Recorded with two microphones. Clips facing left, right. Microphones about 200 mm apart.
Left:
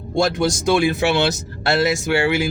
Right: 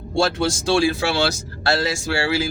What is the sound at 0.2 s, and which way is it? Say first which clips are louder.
Speech: left 2 dB; 15° left (ahead or behind).